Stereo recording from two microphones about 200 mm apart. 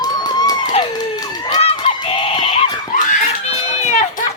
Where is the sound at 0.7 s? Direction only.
20° left (ahead or behind).